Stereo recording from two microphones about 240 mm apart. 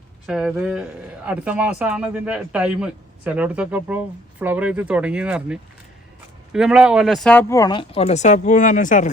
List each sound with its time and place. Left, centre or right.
0.3 s speech: centre; by 9.0 s left